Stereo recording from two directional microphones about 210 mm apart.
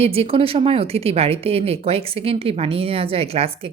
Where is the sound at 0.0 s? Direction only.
30° right (ahead or behind).